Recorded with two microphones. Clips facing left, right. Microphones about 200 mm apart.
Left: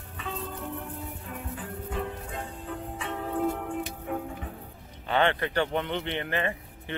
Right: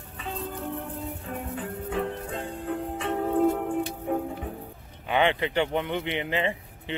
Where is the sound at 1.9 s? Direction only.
60° right (ahead or behind); by 4.2 s 35° right (ahead or behind).